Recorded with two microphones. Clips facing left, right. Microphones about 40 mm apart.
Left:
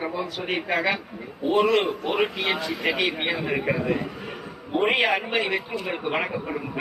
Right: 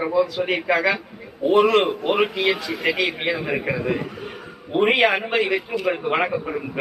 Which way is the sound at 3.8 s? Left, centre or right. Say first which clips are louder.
Right 1 dB; right.